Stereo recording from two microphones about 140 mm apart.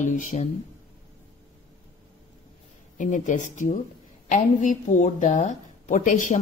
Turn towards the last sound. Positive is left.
turn(degrees=65)  # may be behind; listen again after turning